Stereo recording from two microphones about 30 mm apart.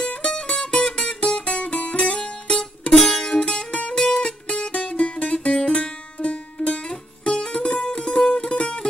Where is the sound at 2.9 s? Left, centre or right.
Centre.